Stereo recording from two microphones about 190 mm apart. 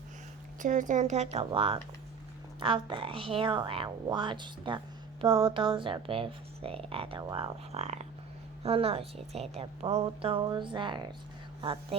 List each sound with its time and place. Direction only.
0.6 s a woman's voice: 40° right (ahead or behind)